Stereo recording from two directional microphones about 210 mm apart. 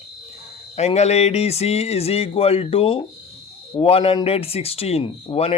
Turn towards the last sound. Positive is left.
turn(degrees=25)  # may be behind; listen again after turning